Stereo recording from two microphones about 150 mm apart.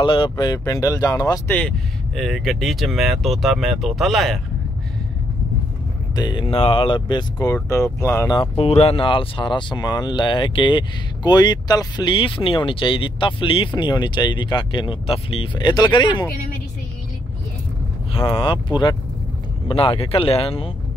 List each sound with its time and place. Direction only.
0.0 s speech: 35° left (ahead or behind)
1.5 s speech: 5° left (ahead or behind)
6.1 s speech: 30° left (ahead or behind)
8.4 s speech: 40° left (ahead or behind)
18.1 s speech: 35° left (ahead or behind)